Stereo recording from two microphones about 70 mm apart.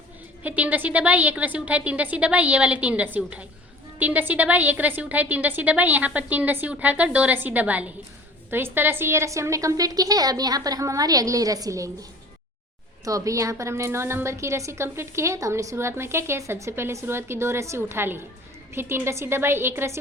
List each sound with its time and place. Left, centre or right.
0.4 s a woman's voice: right
8.4 s a woman's voice: right
13.1 s a woman's voice: right